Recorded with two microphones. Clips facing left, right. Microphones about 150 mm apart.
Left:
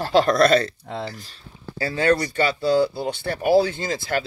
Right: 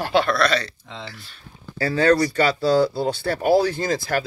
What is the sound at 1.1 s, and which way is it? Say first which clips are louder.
Speech: left 3 dB; 40° left (ahead or behind).